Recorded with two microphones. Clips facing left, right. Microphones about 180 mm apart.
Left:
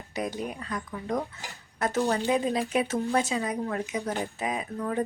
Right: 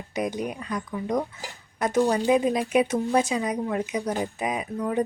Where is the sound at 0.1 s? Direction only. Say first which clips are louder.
Right 4 dB; 20° right (ahead or behind).